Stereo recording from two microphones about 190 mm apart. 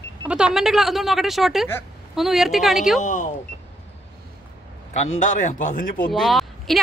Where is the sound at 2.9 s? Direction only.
40° left (ahead or behind).